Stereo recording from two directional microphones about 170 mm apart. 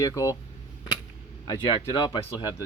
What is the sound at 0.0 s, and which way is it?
Speech, 20° left (ahead or behind).